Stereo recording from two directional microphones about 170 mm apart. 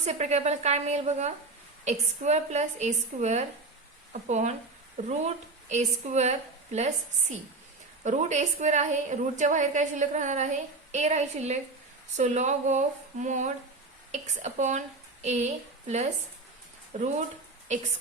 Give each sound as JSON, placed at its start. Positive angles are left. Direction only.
{"t": 0.0, "sound": "a woman's voice", "side_deg": -40}